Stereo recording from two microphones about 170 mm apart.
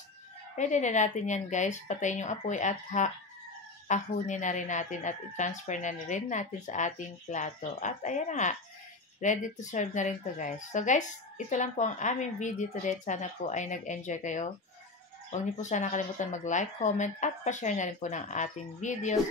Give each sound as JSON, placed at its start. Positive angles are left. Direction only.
{"t": 0.6, "sound": "speech", "side_deg": 45}